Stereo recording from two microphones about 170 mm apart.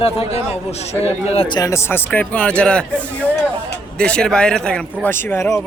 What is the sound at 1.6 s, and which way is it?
A man's voice, 15° left (ahead or behind).